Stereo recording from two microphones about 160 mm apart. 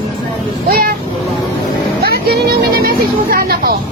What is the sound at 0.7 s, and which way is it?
Speech, 65° right (ahead or behind).